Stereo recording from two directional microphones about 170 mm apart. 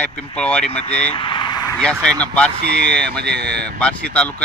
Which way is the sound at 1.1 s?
30° left (ahead or behind).